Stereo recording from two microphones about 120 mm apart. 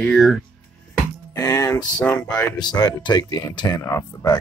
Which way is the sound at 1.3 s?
30° left (ahead or behind).